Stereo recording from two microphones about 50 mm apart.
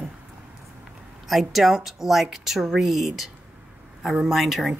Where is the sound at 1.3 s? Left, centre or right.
Centre.